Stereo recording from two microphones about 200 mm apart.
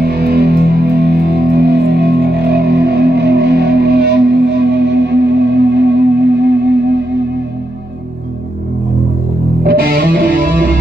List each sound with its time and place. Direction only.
0.0 s music: 50° right (ahead or behind)
9.6 s music: 50° right (ahead or behind)